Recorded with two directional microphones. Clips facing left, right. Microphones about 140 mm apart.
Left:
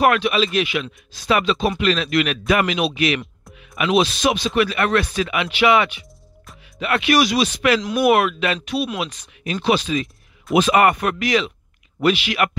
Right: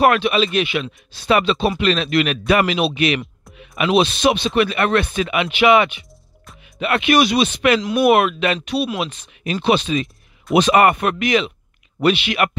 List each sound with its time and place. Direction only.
0.0 s speech: 25° right (ahead or behind)